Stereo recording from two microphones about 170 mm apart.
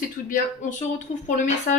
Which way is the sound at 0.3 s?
50° left (ahead or behind).